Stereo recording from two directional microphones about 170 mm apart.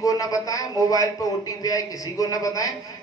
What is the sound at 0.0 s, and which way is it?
A man's voice, 20° left (ahead or behind).